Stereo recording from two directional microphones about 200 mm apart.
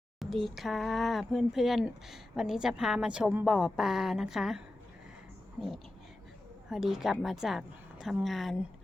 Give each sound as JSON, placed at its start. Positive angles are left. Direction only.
{"t": 0.2, "sound": "speech", "side_deg": 0}